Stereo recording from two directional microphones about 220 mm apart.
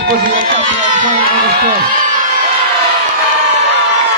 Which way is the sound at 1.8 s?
35° right (ahead or behind).